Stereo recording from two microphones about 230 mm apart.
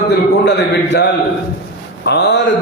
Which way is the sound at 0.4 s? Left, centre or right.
Left.